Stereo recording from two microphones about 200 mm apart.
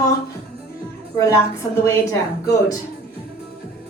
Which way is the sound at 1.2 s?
15° left (ahead or behind).